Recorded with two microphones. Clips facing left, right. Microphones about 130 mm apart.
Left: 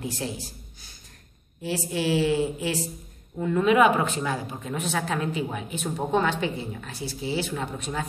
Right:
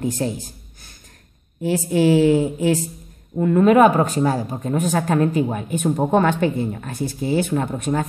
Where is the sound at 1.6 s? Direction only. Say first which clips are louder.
Right 9 dB; 50° right (ahead or behind).